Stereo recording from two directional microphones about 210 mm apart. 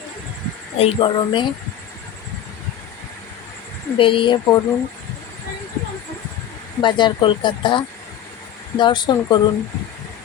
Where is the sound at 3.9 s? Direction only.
25° left (ahead or behind).